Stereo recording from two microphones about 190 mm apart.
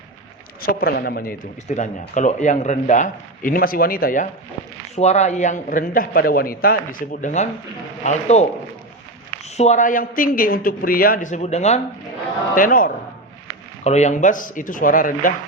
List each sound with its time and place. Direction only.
0.6 s speech: 50° left (ahead or behind)
4.9 s speech: 35° left (ahead or behind)
12.5 s speech: 45° left (ahead or behind)
13.8 s speech: 35° left (ahead or behind)